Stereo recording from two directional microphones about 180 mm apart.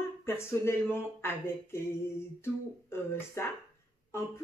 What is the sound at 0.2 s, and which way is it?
Speech, 15° left (ahead or behind).